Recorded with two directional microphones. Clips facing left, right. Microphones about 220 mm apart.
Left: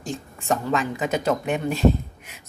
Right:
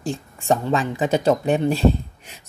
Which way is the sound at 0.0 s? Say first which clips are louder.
Right 4 dB; 30° right (ahead or behind).